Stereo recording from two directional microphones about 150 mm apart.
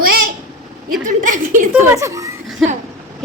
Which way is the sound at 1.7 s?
20° right (ahead or behind).